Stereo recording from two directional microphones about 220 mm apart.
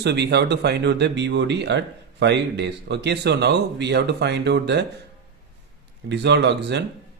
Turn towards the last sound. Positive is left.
turn(degrees=-50)  # may be behind; listen again after turning